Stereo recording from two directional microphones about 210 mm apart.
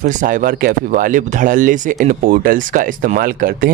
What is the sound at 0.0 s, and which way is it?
Speech, 40° right (ahead or behind).